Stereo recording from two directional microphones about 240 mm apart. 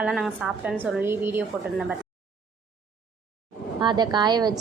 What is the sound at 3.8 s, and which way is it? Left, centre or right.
Speech, centre.